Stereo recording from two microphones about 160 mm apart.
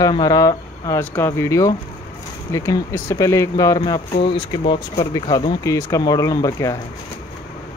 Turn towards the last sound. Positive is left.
turn(degrees=20)  # may be behind; listen again after turning